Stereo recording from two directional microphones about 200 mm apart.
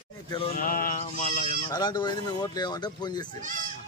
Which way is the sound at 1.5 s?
20° left (ahead or behind).